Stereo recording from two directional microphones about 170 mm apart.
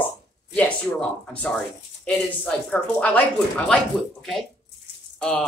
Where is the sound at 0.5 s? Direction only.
5° left (ahead or behind).